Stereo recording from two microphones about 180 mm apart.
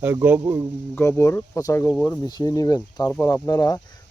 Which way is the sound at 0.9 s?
15° left (ahead or behind).